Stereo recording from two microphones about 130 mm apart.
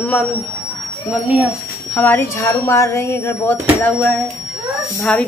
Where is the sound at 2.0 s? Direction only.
15° left (ahead or behind).